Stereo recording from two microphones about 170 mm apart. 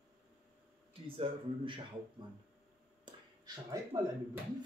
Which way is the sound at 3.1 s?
20° right (ahead or behind).